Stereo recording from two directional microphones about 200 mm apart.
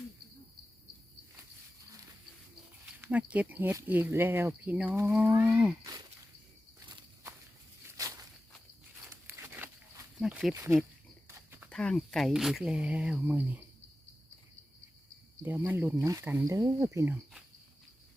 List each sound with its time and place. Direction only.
2.8 s speech: 5° right (ahead or behind)
6.7 s walk: 15° right (ahead or behind)
9.0 s a sound: 10° right (ahead or behind)
10.5 s speech: 10° right (ahead or behind)
11.3 s a sound: 10° right (ahead or behind)
11.7 s speech: 5° left (ahead or behind)
15.4 s speech: 10° right (ahead or behind)